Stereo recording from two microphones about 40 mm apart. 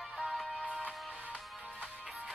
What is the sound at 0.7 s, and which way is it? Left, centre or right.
Music, right.